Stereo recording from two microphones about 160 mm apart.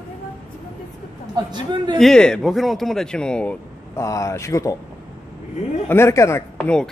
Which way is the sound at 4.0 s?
20° left (ahead or behind).